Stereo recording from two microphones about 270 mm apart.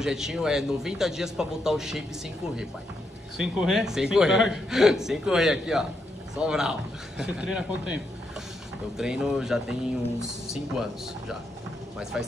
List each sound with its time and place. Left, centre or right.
0.0 s a man's voice: centre
3.3 s a man's voice: centre